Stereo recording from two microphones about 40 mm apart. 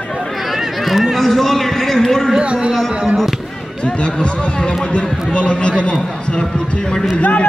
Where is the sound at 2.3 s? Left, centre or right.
Right.